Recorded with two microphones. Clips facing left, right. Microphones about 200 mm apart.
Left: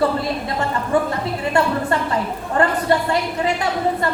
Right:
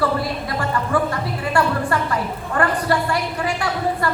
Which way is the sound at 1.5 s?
25° left (ahead or behind).